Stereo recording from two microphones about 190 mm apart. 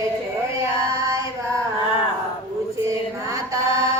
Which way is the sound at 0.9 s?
15° right (ahead or behind).